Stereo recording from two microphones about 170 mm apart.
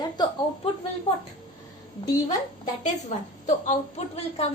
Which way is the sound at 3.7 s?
40° left (ahead or behind).